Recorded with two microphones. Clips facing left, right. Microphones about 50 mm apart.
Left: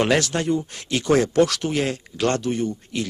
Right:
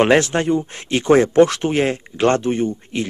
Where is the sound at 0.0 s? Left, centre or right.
Right.